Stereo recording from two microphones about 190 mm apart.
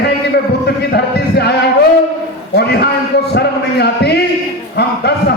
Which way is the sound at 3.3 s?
60° left (ahead or behind).